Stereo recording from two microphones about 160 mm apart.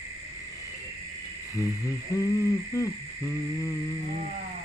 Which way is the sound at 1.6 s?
20° left (ahead or behind).